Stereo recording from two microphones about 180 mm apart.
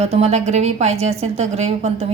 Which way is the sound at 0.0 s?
35° right (ahead or behind).